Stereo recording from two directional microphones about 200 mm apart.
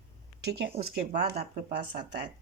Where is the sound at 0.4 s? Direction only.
55° right (ahead or behind).